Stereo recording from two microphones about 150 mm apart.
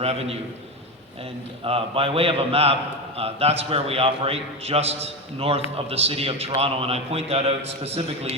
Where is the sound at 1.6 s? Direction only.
40° right (ahead or behind).